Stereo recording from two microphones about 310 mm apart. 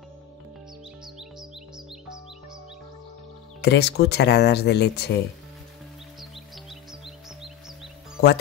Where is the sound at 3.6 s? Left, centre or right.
Left.